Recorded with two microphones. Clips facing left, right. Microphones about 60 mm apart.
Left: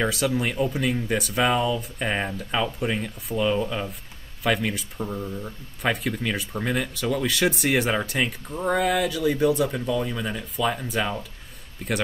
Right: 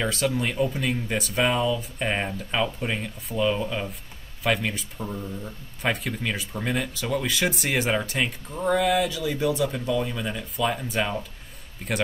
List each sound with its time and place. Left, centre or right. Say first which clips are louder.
0.1 s speech: left 1 dB; centre
5.0 s speech: left 2 dB; centre
5.8 s speech: left 2 dB; centre